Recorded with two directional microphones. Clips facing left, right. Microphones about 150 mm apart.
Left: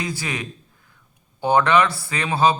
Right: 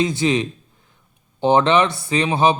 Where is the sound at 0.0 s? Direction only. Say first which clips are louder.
Right 9 dB; 25° right (ahead or behind).